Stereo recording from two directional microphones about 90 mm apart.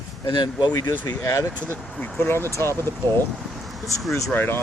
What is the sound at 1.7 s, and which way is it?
Speech, 25° left (ahead or behind).